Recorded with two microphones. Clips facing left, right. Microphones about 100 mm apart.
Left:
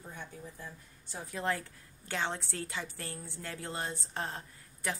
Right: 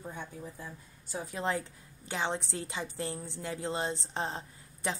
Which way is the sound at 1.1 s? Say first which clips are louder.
Right 2 dB; 20° right (ahead or behind).